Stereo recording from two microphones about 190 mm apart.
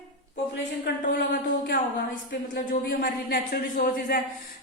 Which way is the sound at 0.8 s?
55° left (ahead or behind).